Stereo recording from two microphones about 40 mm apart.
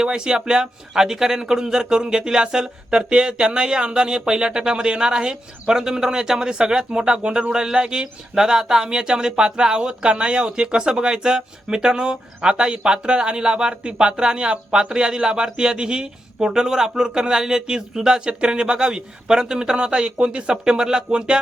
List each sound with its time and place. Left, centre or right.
0.0 s speech: centre